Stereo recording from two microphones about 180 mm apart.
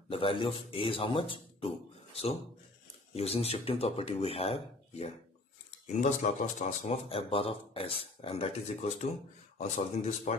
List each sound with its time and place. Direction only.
0.1 s speech: 30° left (ahead or behind)
3.2 s speech: 35° left (ahead or behind)